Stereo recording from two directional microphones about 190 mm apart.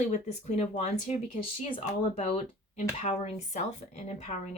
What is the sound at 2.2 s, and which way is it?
Speech, 35° left (ahead or behind).